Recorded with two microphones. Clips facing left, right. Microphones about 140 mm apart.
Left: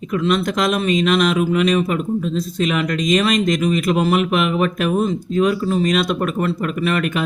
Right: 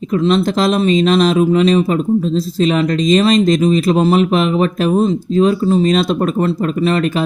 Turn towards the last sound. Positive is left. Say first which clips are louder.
# right 5 dB
turn(degrees=-30)  # may be behind; listen again after turning